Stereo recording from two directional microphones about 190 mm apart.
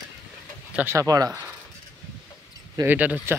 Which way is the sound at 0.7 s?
15° right (ahead or behind).